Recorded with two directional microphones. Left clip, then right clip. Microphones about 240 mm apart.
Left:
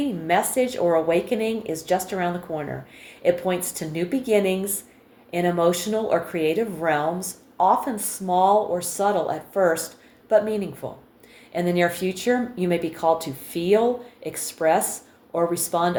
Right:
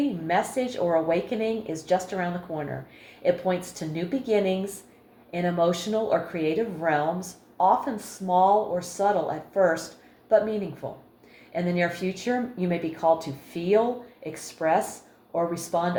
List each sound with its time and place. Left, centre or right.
0.3 s speech: left